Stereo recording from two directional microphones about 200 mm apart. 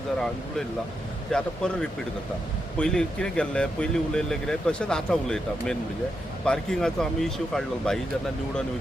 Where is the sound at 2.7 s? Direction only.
5° left (ahead or behind).